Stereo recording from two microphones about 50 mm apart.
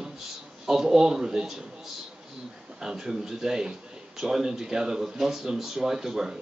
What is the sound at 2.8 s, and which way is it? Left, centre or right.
Speech, centre.